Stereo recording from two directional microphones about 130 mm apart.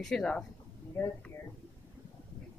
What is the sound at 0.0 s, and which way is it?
Speech, 5° left (ahead or behind).